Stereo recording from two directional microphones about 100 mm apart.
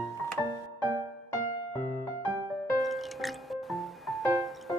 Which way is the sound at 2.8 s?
Centre (ahead or behind).